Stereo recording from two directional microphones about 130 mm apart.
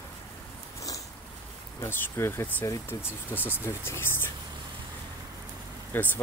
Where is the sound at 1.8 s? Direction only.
20° left (ahead or behind).